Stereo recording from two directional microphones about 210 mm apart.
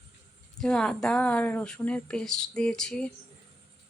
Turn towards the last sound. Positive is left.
turn(degrees=5)  # may be behind; listen again after turning